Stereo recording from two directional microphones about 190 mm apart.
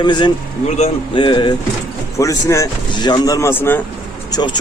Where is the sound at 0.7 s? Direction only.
35° left (ahead or behind).